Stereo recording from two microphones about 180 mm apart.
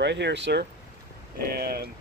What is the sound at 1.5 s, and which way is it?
Speech, 60° right (ahead or behind).